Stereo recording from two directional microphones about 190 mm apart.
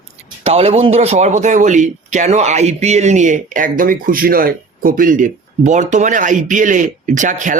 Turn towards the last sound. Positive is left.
turn(degrees=-40)  # may be behind; listen again after turning